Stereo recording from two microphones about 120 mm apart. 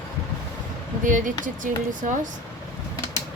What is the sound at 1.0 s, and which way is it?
Speech, 90° right.